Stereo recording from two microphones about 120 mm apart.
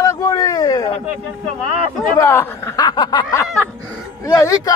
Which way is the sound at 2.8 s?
35° left (ahead or behind).